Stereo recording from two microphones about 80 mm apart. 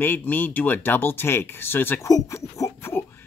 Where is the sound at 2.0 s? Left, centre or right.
Left.